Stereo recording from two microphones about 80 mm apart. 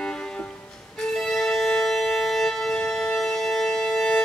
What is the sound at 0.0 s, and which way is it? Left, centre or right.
Music, centre.